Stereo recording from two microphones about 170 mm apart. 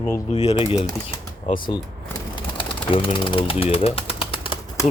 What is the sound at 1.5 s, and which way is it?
Speech, 25° left (ahead or behind).